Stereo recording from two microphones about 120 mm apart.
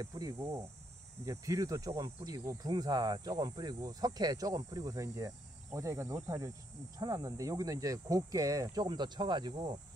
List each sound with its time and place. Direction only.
0.0 s speech: 30° right (ahead or behind)